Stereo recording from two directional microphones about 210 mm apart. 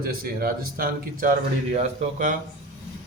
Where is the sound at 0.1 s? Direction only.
45° right (ahead or behind).